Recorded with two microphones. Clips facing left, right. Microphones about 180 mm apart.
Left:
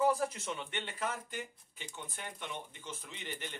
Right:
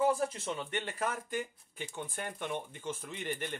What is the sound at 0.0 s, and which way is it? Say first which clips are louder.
Speech: right 1 dB; 25° right (ahead or behind).